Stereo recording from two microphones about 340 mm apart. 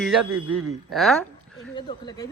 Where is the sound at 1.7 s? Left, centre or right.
Centre.